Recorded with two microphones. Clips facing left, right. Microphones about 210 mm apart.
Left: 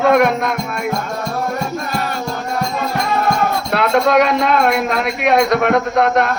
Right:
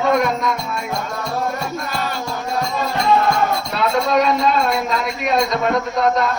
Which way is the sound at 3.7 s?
70° left (ahead or behind).